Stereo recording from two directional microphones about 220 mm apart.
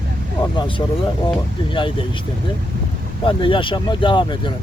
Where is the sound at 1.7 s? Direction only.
20° left (ahead or behind).